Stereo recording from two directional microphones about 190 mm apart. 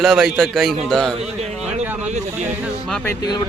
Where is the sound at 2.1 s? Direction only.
35° right (ahead or behind).